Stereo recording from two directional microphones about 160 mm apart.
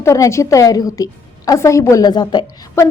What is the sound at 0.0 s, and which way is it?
A woman's voice, 20° left (ahead or behind).